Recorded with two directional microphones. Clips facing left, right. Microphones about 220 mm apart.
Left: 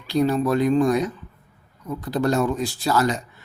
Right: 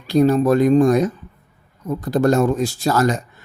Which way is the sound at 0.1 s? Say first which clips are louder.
Right 5 dB; 45° right (ahead or behind).